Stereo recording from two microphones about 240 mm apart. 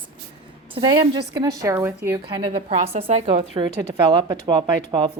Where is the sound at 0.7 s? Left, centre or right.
Centre.